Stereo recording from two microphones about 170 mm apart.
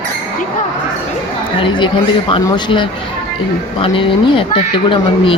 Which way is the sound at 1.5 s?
30° left (ahead or behind).